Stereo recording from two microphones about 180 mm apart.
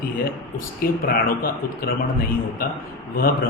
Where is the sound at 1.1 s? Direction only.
55° left (ahead or behind).